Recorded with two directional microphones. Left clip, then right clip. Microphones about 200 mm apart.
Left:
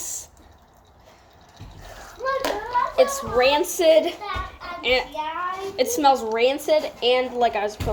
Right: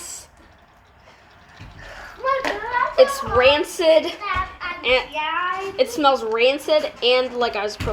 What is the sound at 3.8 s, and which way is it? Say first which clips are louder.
Speech: left 1 dB; 20° left (ahead or behind).